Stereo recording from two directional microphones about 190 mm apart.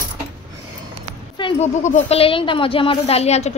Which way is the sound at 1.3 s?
25° left (ahead or behind).